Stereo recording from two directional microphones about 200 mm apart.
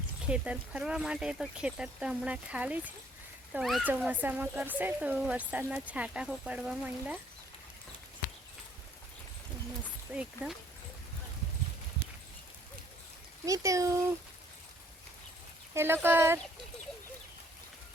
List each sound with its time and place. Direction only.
0.3 s speech: 5° right (ahead or behind)
10.1 s speech: 5° right (ahead or behind)
13.4 s speech: 15° right (ahead or behind)
15.7 s speech: 10° right (ahead or behind)